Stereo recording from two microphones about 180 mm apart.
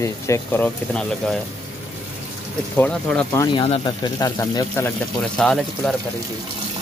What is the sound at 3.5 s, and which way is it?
Speech, 30° left (ahead or behind).